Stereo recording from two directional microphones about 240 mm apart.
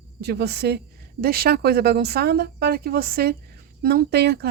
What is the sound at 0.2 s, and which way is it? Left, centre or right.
Speech, right.